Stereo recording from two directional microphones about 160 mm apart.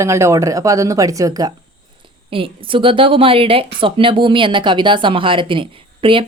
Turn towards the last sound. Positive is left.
turn(degrees=-35)  # may be behind; listen again after turning